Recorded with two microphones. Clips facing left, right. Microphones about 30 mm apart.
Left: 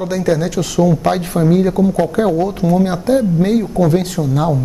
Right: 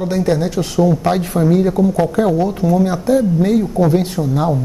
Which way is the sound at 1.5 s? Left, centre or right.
Centre.